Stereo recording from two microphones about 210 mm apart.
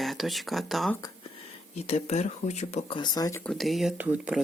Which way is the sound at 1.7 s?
30° left (ahead or behind).